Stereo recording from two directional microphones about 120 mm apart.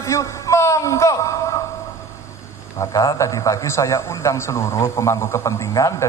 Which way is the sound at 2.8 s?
30° left (ahead or behind).